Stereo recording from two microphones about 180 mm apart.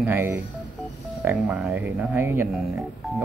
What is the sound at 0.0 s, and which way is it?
Speech, 10° right (ahead or behind).